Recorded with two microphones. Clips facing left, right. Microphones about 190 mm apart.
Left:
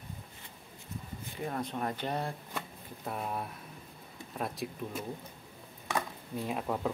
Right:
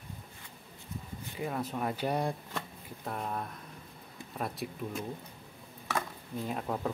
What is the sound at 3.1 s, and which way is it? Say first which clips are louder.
Speech: even; 5° left (ahead or behind).